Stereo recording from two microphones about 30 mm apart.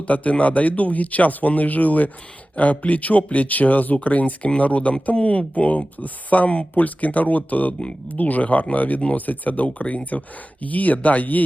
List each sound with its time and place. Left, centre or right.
0.0 s speech: left
4.4 s speech: left
7.7 s speech: left
8.0 s speech: left